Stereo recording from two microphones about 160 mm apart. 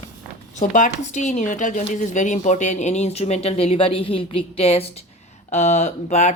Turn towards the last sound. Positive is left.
turn(degrees=45)  # may be behind; listen again after turning